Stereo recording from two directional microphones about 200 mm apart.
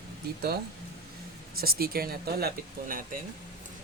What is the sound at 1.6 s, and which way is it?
Speech, 50° right (ahead or behind).